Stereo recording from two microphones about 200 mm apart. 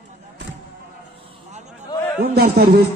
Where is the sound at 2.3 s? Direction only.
50° right (ahead or behind).